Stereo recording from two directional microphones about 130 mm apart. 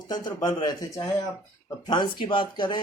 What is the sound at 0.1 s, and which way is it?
Speech, 35° left (ahead or behind).